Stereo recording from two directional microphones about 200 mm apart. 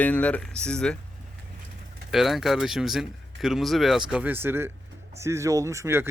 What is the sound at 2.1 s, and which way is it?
Speech, centre (ahead or behind).